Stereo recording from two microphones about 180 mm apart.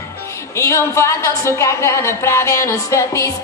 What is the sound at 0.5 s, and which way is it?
A woman's voice, 15° left (ahead or behind).